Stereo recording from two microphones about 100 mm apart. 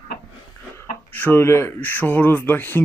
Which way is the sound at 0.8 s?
20° left (ahead or behind).